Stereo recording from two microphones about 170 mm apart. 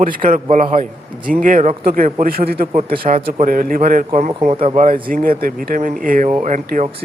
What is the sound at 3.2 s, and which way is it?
Speech, 35° right (ahead or behind).